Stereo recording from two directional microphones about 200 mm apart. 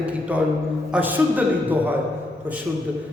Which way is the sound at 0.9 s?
10° right (ahead or behind).